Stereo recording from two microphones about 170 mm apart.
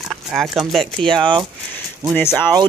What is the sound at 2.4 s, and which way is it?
Speech, 25° right (ahead or behind).